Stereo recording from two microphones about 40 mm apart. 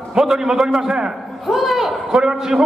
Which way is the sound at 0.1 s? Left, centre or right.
Centre.